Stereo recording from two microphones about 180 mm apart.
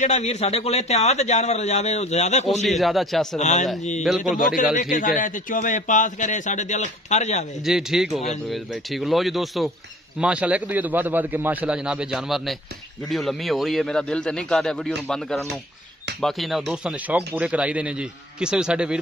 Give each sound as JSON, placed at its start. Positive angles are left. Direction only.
{"t": 0.0, "sound": "a man's voice", "side_deg": 40}
{"t": 2.6, "sound": "speech", "side_deg": 0}
{"t": 3.3, "sound": "a man's voice", "side_deg": 40}
{"t": 7.6, "sound": "a man's voice", "side_deg": 0}